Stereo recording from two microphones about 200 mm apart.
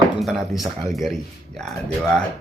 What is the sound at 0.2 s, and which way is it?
Speech, centre (ahead or behind).